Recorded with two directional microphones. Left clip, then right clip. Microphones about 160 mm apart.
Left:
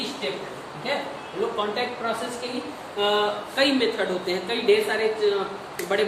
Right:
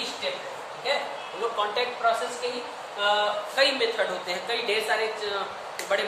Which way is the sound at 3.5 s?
5° right (ahead or behind).